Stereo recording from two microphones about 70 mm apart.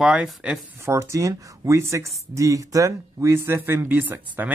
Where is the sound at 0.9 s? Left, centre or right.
Right.